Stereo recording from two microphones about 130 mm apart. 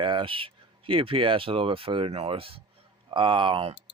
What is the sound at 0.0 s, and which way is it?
Speech, 40° right (ahead or behind).